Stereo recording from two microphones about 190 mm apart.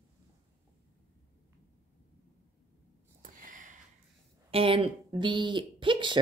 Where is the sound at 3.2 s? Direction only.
45° right (ahead or behind).